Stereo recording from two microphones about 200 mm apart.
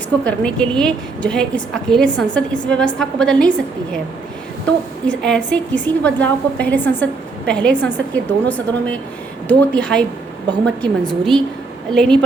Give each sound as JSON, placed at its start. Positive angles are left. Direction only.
{"t": 0.3, "sound": "a woman's voice", "side_deg": 5}
{"t": 11.1, "sound": "a woman's voice", "side_deg": 0}